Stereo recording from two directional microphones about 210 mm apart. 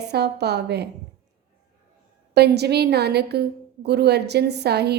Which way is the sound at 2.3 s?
50° right (ahead or behind).